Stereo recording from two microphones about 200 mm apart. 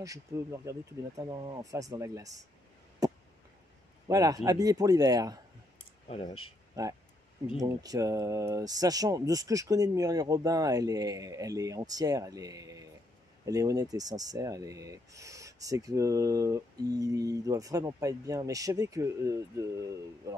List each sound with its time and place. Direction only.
0.0 s speech: 15° right (ahead or behind)
3.0 s a sound: 20° right (ahead or behind)
4.1 s a man's voice: 15° right (ahead or behind)
6.7 s speech: 15° right (ahead or behind)